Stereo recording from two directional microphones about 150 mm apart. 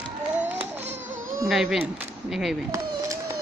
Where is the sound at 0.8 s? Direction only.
50° right (ahead or behind).